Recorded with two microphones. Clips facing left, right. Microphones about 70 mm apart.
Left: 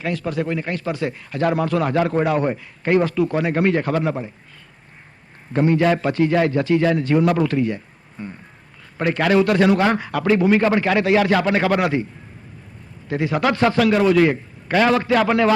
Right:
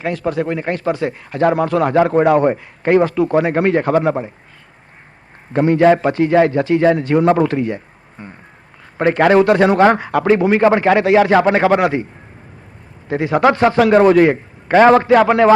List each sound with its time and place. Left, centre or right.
0.0 s a man's voice: right
5.6 s a man's voice: right
9.0 s a man's voice: right
13.1 s a man's voice: right